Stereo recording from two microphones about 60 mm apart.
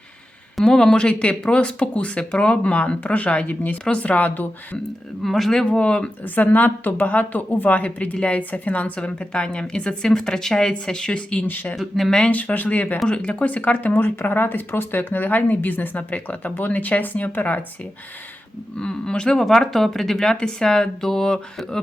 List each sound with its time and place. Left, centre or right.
0.5 s a woman's voice: centre; by 4.8 s left
5.2 s speech: centre
6.2 s a woman's voice: left
11.4 s speech: left
11.8 s speech: centre
12.3 s a woman's voice: left
18.8 s speech: centre